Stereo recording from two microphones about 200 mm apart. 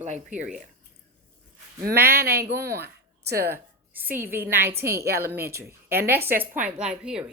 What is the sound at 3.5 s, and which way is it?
A woman's voice, 10° right (ahead or behind).